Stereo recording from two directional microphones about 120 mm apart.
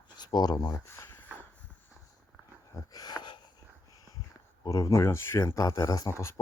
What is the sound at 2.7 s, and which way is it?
Dog, 35° left (ahead or behind).